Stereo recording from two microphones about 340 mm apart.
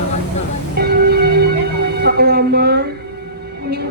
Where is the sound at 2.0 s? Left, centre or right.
Right.